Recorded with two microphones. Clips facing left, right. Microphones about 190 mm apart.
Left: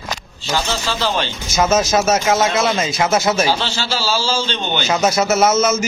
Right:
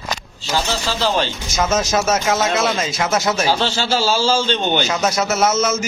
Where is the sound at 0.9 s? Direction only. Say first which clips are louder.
Right 2 dB; 35° right (ahead or behind).